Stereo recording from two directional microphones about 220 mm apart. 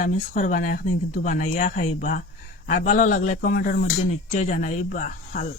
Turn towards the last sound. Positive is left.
turn(degrees=35)  # may be behind; listen again after turning